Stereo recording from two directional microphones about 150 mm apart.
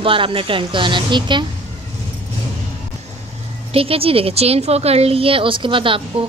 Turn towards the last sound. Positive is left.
turn(degrees=-35)  # may be behind; listen again after turning